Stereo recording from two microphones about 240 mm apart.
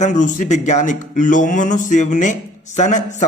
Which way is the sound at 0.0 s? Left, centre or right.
Left.